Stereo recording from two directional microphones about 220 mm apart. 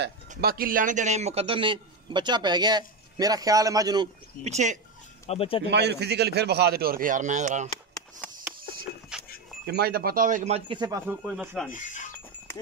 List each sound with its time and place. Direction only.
0.3 s a man's voice: 40° right (ahead or behind); by 4.1 s 20° right (ahead or behind)
4.5 s speech: 30° right (ahead or behind)
5.2 s speech: 25° left (ahead or behind)
5.7 s a man's voice: 50° right (ahead or behind); by 7.7 s 35° right (ahead or behind)
9.1 s goat: 5° right (ahead or behind)
9.7 s a man's voice: 45° right (ahead or behind); by 11.7 s centre (ahead or behind)
11.7 s a sound: 35° left (ahead or behind)
12.5 s clip-clop: 10° left (ahead or behind)